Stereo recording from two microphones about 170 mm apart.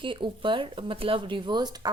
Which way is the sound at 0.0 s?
30° right (ahead or behind).